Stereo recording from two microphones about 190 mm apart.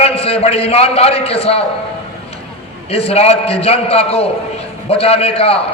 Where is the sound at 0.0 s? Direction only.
30° left (ahead or behind).